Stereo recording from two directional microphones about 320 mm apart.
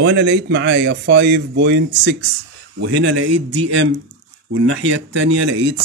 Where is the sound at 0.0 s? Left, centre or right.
Right.